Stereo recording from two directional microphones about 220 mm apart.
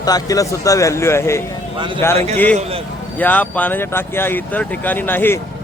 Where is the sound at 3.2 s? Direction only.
5° left (ahead or behind).